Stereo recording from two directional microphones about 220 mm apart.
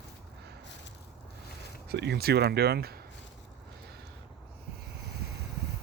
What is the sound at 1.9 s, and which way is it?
Speech, 50° right (ahead or behind).